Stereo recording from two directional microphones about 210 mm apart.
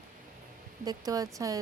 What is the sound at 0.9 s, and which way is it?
Speech, 15° right (ahead or behind).